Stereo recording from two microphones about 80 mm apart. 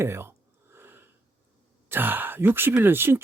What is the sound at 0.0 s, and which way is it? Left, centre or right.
Speech, right.